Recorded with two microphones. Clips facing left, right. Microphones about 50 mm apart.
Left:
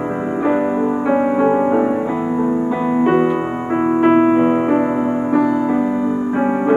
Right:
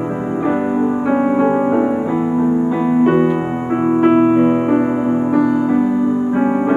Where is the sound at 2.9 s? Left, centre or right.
Centre.